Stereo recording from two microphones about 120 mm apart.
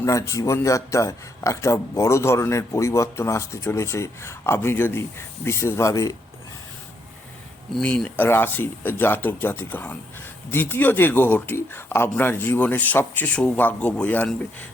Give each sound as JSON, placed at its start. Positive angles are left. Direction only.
{"t": 0.0, "sound": "speech", "side_deg": 25}
{"t": 7.7, "sound": "speech", "side_deg": 5}